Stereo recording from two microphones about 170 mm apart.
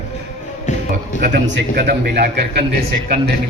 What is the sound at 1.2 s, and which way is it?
A man's voice, 75° right (ahead or behind).